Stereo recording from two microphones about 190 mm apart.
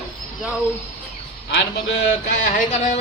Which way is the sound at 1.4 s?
65° left (ahead or behind).